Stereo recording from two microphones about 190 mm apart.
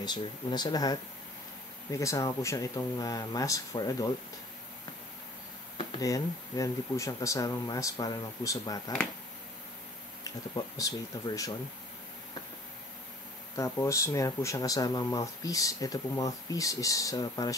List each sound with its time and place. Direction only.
0.0 s speech: 25° left (ahead or behind)
2.0 s speech: 15° left (ahead or behind)
5.8 s speech: 25° left (ahead or behind)
10.2 s speech: 20° left (ahead or behind)
13.6 s speech: 15° left (ahead or behind)